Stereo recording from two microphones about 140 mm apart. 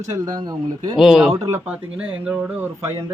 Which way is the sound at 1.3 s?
20° right (ahead or behind).